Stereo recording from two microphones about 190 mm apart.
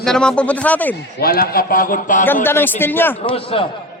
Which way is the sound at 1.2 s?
55° left (ahead or behind).